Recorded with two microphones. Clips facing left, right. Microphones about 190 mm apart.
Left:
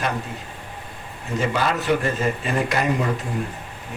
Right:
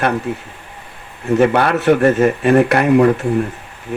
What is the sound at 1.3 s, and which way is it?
A man's voice, 65° right (ahead or behind).